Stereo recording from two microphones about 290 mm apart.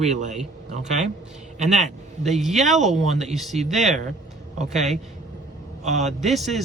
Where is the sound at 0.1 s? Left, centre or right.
Right.